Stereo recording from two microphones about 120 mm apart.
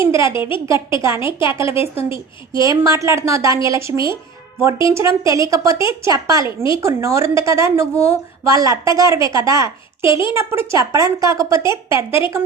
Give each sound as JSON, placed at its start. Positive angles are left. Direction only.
{"t": 0.0, "sound": "a woman's voice", "side_deg": -25}
{"t": 0.3, "sound": "a woman's voice", "side_deg": 45}
{"t": 0.7, "sound": "a woman's voice", "side_deg": -25}